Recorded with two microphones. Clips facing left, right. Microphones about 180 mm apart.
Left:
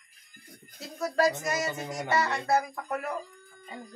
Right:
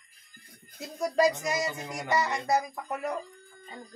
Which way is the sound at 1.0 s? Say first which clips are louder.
Right 1 dB; 15° right (ahead or behind).